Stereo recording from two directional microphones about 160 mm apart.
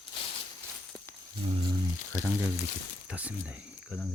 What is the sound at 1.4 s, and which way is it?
Speech, 35° right (ahead or behind).